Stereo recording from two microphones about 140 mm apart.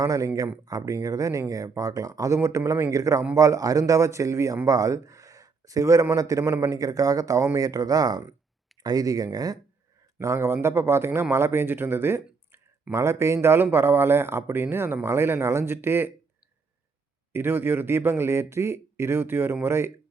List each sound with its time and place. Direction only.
0.0 s a man's voice: 25° right (ahead or behind)
17.3 s a man's voice: 15° right (ahead or behind)